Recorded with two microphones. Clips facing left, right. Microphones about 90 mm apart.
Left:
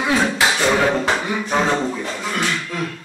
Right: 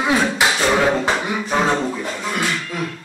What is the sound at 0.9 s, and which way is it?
Speech, 15° right (ahead or behind).